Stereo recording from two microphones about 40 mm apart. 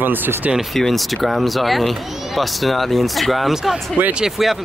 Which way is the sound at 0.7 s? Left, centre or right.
Centre.